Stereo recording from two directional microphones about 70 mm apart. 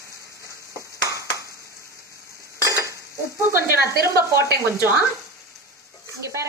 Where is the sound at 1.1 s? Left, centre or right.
Right.